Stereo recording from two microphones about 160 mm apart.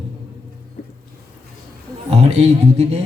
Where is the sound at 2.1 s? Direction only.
40° right (ahead or behind).